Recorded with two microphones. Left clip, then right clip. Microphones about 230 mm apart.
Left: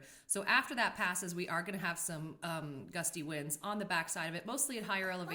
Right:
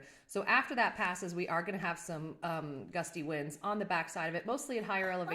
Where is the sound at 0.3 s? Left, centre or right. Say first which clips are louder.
Right 1 dB; left.